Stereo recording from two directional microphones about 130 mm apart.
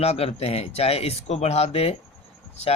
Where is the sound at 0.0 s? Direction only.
50° left (ahead or behind).